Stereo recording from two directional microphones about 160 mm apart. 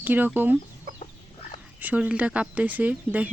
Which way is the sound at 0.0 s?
10° right (ahead or behind).